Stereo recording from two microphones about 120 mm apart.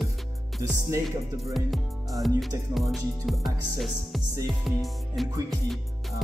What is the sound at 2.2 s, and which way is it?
Music, centre (ahead or behind).